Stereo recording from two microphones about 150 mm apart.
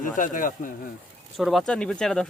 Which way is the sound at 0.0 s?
65° left (ahead or behind).